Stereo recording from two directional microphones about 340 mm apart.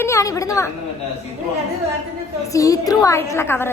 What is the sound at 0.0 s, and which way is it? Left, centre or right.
Speech, centre.